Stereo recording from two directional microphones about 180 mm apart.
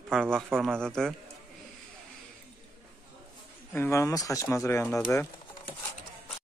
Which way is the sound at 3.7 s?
15° left (ahead or behind).